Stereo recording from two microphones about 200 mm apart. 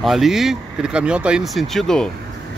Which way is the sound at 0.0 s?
Centre (ahead or behind).